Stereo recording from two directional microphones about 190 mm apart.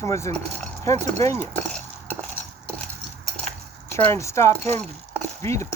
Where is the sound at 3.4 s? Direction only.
5° left (ahead or behind).